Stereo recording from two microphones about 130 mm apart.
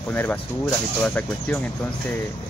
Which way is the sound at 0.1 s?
15° left (ahead or behind).